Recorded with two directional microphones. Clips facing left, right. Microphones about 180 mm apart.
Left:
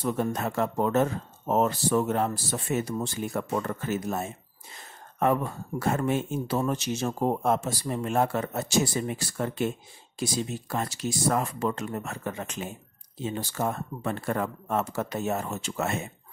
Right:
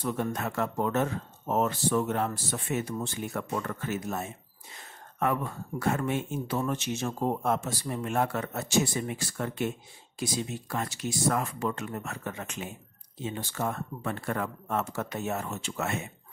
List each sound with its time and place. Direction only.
0.0 s speech: 35° left (ahead or behind)